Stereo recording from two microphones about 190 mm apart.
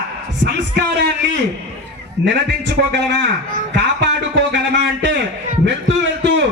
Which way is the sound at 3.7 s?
65° right (ahead or behind).